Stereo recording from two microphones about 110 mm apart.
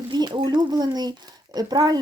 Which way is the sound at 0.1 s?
45° right (ahead or behind).